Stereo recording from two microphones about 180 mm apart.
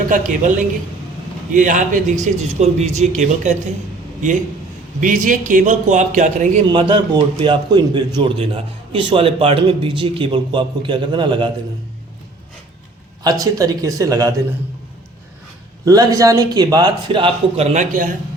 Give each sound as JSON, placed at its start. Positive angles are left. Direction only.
{"t": 0.1, "sound": "a man's voice", "side_deg": -45}
{"t": 1.5, "sound": "a man's voice", "side_deg": -45}
{"t": 4.9, "sound": "a man's voice", "side_deg": -45}
{"t": 6.7, "sound": "a man's voice", "side_deg": -25}
{"t": 13.4, "sound": "a man's voice", "side_deg": -20}
{"t": 15.8, "sound": "a man's voice", "side_deg": -20}
{"t": 17.7, "sound": "a man's voice", "side_deg": -45}